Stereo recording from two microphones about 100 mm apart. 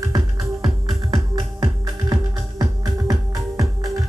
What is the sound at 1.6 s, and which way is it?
Music, 40° right (ahead or behind).